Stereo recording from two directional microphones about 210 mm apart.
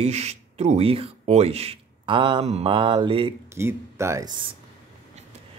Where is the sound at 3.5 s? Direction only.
10° right (ahead or behind).